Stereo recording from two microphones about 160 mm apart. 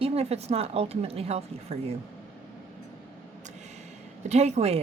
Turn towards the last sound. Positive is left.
turn(degrees=-40)  # may be behind; listen again after turning